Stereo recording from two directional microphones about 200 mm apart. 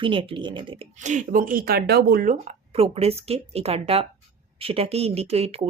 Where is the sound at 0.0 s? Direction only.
25° right (ahead or behind).